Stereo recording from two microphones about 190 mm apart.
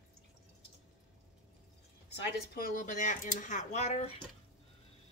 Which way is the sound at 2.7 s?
45° left (ahead or behind).